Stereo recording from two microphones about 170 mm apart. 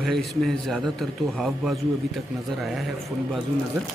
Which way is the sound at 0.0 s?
Centre (ahead or behind).